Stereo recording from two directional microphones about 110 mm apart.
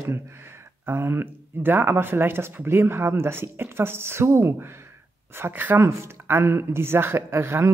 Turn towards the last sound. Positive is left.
turn(degrees=-25)  # may be behind; listen again after turning